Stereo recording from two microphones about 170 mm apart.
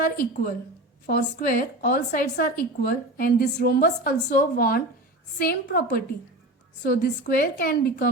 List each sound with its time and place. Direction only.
0.0 s a woman's voice: 60° left (ahead or behind)